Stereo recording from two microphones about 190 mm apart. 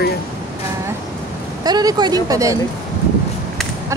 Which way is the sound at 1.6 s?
20° right (ahead or behind).